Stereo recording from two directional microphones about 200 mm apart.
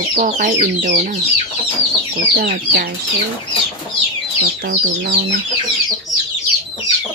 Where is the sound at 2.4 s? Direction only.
50° right (ahead or behind).